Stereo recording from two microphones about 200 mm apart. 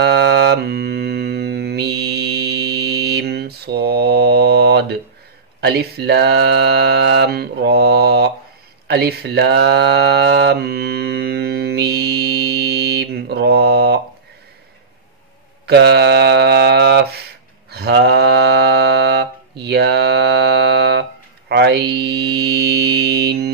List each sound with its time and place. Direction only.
0.0 s mantra: 55° right (ahead or behind)
8.8 s speech: 55° right (ahead or behind)
15.6 s mantra: 55° right (ahead or behind)